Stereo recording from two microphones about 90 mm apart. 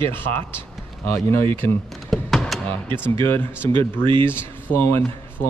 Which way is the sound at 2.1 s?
5° left (ahead or behind).